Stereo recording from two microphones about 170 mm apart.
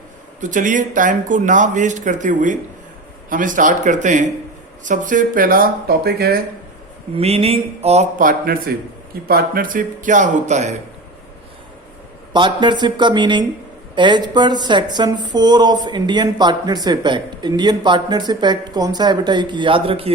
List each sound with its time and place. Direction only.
0.3 s speech: 50° right (ahead or behind); by 6.4 s 65° right (ahead or behind)
7.2 s a sound: 35° right (ahead or behind)
8.2 s speech: 55° right (ahead or behind)
12.3 s speech: 30° right (ahead or behind)